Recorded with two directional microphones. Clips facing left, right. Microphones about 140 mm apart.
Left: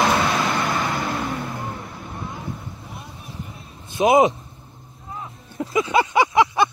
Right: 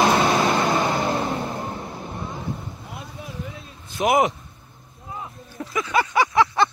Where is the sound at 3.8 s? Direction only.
20° left (ahead or behind).